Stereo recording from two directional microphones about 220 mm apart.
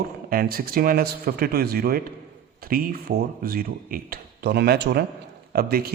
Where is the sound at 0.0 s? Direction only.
40° right (ahead or behind).